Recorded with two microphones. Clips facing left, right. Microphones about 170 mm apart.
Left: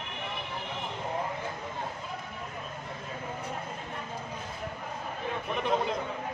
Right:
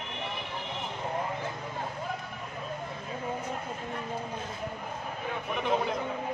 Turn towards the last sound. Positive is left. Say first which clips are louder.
# even
turn(degrees=0)  # may be behind; listen again after turning